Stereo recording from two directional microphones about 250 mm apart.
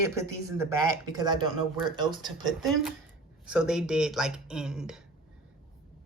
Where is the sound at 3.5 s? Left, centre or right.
Centre.